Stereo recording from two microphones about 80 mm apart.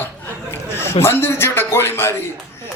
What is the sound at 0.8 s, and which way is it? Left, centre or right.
A man's voice, left.